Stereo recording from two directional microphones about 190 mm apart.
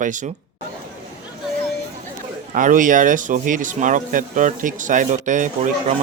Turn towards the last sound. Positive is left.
turn(degrees=-40)  # may be behind; listen again after turning